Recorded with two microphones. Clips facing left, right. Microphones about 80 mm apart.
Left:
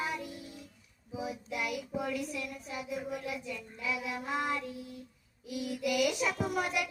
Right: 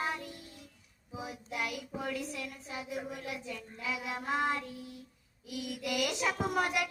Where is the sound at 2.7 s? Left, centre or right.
Right.